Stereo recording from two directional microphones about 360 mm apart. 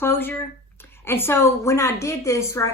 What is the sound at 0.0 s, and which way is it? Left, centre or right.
Speech, centre.